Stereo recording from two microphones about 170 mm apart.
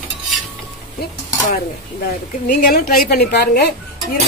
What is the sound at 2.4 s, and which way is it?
A woman's voice, 60° left (ahead or behind).